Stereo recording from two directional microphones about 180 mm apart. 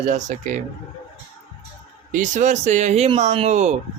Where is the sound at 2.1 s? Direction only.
45° right (ahead or behind).